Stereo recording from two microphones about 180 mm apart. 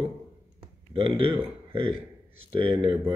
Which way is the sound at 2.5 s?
30° right (ahead or behind).